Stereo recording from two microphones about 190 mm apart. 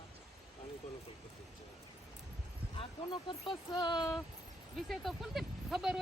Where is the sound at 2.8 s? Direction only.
25° left (ahead or behind).